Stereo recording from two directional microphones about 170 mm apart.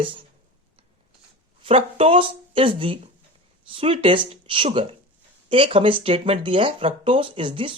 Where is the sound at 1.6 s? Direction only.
35° right (ahead or behind).